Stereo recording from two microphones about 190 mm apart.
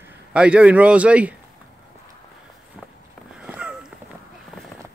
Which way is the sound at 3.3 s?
5° right (ahead or behind).